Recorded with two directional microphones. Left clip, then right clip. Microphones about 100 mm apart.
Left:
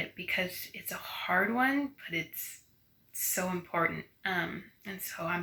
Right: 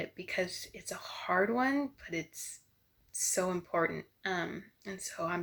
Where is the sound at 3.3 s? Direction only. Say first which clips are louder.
Even; 20° right (ahead or behind).